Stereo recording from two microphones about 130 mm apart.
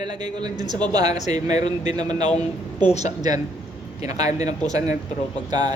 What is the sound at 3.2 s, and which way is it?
Speech, 30° right (ahead or behind).